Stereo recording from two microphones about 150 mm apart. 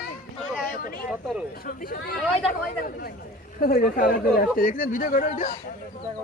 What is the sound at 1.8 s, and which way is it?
Speech, 80° left.